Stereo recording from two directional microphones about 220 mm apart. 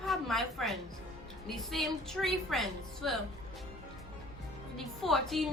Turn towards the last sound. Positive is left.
turn(degrees=0)  # may be behind; listen again after turning